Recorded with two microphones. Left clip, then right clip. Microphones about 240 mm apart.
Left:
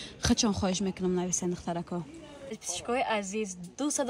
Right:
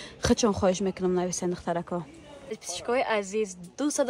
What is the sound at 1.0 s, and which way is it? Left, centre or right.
Speech, right.